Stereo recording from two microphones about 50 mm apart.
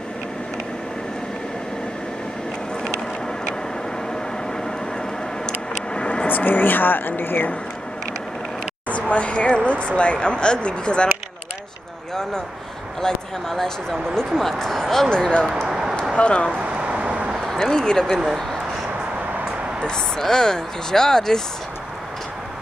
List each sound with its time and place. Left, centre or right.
5.9 s a sound: centre
6.2 s speech: left
8.8 s speech: left
13.0 s speech: centre
15.5 s a sound: centre
16.2 s speech: left
16.5 s a sound: right
17.6 s speech: centre
19.9 s speech: centre